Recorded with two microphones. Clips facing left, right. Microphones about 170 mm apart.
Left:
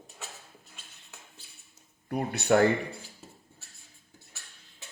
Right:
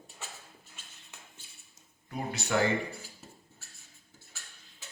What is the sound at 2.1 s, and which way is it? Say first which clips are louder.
Speech: left 7 dB; 60° left (ahead or behind).